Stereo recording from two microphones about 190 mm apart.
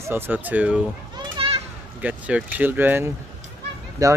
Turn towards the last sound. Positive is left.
turn(degrees=-15)  # may be behind; listen again after turning